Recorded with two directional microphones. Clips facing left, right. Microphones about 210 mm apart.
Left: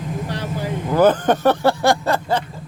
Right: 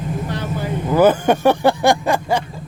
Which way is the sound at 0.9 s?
10° right (ahead or behind).